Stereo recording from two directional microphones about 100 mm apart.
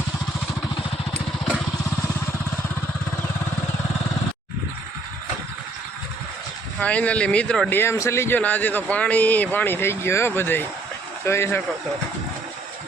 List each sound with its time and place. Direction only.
6.7 s speech: 15° left (ahead or behind)
7.7 s speech: 25° left (ahead or behind)
8.4 s speech: 15° left (ahead or behind)